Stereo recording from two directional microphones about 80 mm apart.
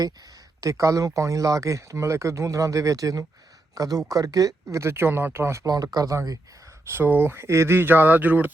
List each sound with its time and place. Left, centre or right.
0.0 s speech: right
5.6 s speech: right
6.9 s speech: right